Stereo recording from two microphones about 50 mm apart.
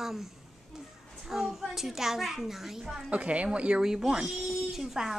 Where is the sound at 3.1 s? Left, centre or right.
Right.